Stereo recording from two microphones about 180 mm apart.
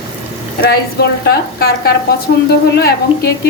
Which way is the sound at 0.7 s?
65° left (ahead or behind).